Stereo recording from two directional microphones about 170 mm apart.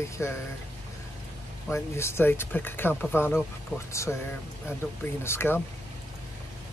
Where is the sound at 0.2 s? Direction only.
15° left (ahead or behind).